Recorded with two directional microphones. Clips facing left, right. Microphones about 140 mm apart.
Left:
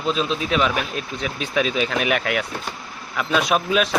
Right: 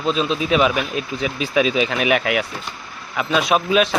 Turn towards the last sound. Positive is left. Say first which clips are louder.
# right 3 dB
turn(degrees=0)  # may be behind; listen again after turning